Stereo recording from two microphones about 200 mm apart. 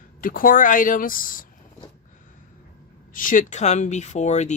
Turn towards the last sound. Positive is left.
turn(degrees=35)  # may be behind; listen again after turning